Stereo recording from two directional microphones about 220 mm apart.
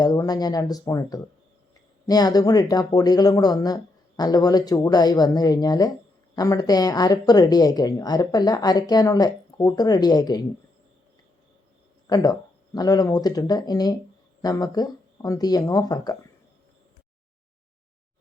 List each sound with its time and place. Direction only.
0.0 s speech: 15° left (ahead or behind)
12.0 s speech: 15° left (ahead or behind)